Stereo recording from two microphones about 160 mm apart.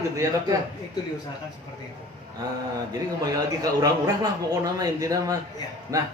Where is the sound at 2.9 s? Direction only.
25° right (ahead or behind).